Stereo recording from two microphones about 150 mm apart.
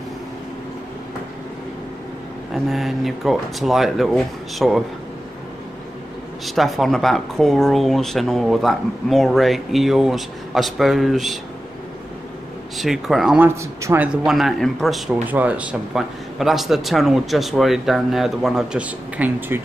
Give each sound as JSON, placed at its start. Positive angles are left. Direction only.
{"t": 2.5, "sound": "speech", "side_deg": 0}
{"t": 6.4, "sound": "speech", "side_deg": 0}
{"t": 12.7, "sound": "speech", "side_deg": 0}
{"t": 13.4, "sound": "a man's voice", "side_deg": -20}
{"t": 14.0, "sound": "speech", "side_deg": 0}
{"t": 15.2, "sound": "speech", "side_deg": -10}